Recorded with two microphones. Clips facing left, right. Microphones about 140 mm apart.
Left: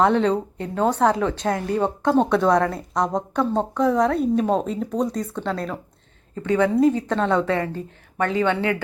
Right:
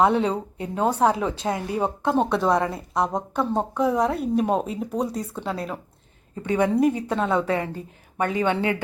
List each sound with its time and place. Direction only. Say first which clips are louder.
0.0 s speech: left 2 dB; 10° right (ahead or behind)
6.3 s speech: left 2 dB; 20° right (ahead or behind)